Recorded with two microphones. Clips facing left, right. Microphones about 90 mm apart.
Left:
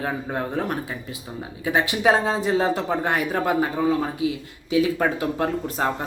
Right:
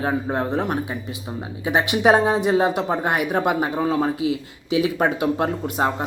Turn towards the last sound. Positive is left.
turn(degrees=-20)  # may be behind; listen again after turning